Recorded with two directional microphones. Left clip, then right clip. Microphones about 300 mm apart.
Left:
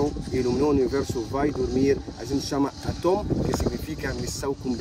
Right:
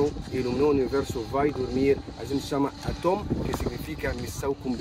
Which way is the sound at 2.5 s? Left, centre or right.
Centre.